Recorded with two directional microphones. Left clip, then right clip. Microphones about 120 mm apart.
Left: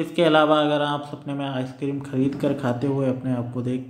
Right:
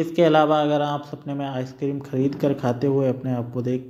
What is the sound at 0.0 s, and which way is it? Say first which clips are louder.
A man's voice: right 1 dB; 25° right (ahead or behind).